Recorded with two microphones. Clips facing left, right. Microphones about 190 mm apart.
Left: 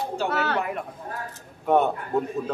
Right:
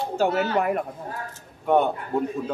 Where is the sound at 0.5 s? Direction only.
50° right (ahead or behind).